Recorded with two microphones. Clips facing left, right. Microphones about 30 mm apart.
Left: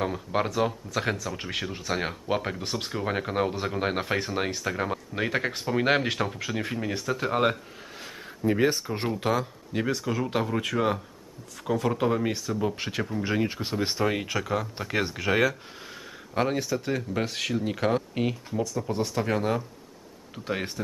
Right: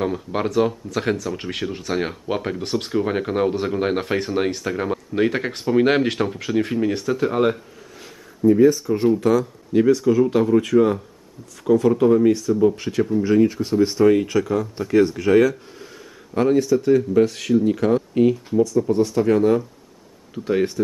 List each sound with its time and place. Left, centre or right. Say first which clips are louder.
0.0 s speech: right 4 dB; centre
7.2 s speech: right 4 dB; centre
8.4 s speech: right 10 dB; left
9.7 s speech: right 14 dB; centre
18.3 s speech: right 11 dB; centre